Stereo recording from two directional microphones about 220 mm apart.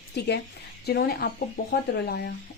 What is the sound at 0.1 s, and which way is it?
A woman's voice, 50° left (ahead or behind).